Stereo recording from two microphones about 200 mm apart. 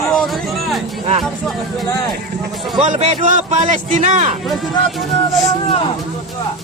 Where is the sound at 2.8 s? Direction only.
35° right (ahead or behind).